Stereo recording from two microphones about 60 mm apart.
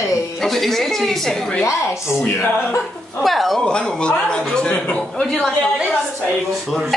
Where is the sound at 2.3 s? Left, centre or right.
Left.